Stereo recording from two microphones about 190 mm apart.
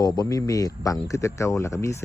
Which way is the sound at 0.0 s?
20° left (ahead or behind).